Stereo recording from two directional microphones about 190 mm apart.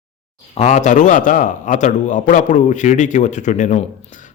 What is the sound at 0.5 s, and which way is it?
A man's voice, 35° left (ahead or behind).